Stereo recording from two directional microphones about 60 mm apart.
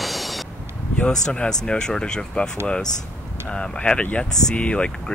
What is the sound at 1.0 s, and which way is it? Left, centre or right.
Speech, centre.